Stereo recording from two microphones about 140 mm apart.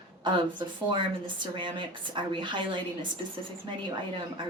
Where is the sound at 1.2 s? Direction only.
35° right (ahead or behind).